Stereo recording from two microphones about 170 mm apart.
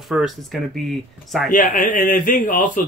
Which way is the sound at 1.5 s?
50° left (ahead or behind).